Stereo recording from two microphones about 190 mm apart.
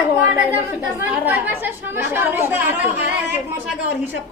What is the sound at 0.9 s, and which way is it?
Speech, 10° right (ahead or behind).